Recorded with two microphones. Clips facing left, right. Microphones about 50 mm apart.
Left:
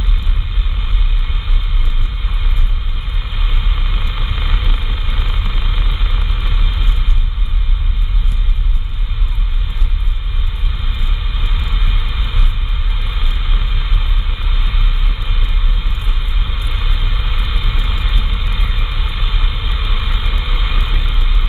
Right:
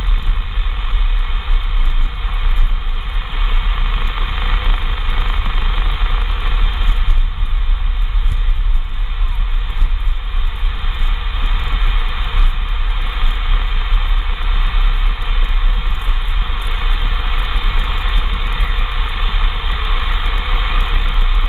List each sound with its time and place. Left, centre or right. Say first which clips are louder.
3.3 s vehicle: right 2 dB; centre
11.3 s vehicle: right 2 dB; centre